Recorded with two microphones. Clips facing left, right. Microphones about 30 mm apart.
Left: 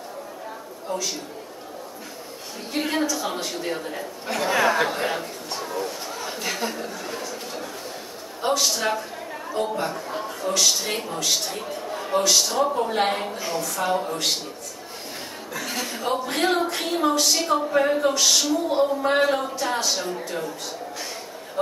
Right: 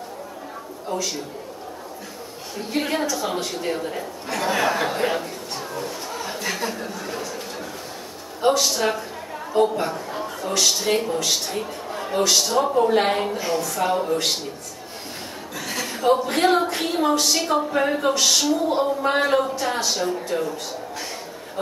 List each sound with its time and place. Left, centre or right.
0.9 s a woman's voice: centre
2.7 s a woman's voice: centre
15.5 s chuckle: centre
15.9 s a woman's voice: centre